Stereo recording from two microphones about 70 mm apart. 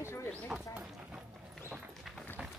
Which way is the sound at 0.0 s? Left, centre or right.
Left.